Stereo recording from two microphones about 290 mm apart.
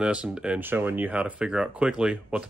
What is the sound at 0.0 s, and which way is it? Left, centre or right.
Speech, centre.